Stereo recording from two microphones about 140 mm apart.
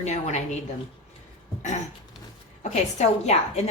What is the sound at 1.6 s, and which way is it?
Throat clearing, 55° left (ahead or behind).